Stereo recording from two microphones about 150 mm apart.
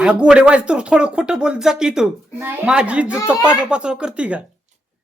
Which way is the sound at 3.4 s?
15° left (ahead or behind).